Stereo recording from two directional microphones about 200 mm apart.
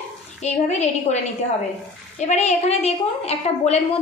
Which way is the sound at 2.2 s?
35° left (ahead or behind).